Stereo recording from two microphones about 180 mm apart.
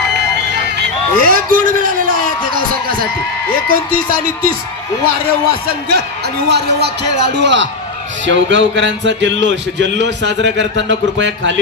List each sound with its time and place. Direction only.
1.2 s a sound: 50° right (ahead or behind)
3.6 s speech: 55° right (ahead or behind)
5.7 s a man's voice: 60° right (ahead or behind); by 7.7 s 80° right
8.3 s speech: 90° right